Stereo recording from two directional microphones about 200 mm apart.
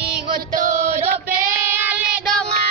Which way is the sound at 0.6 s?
40° right (ahead or behind).